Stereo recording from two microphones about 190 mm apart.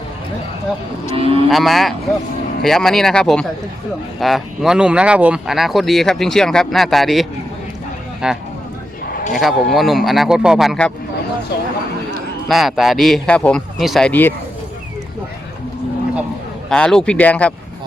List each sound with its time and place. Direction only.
1.1 s livestock: 30° right (ahead or behind)
1.5 s speech: centre (ahead or behind)
12.5 s speech: centre (ahead or behind)
16.6 s speech: 5° left (ahead or behind)